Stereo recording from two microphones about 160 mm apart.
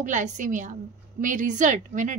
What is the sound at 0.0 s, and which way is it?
A woman's voice, 50° right (ahead or behind).